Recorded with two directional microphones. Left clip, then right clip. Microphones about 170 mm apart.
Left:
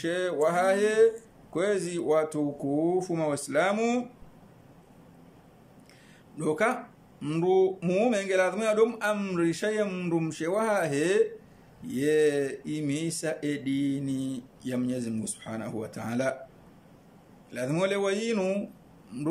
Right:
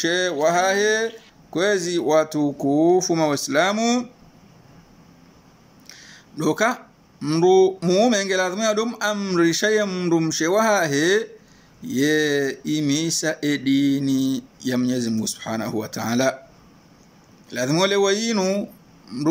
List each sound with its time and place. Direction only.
0.0 s speech: 10° left (ahead or behind)
5.9 s speech: 10° left (ahead or behind)
17.5 s speech: 10° left (ahead or behind)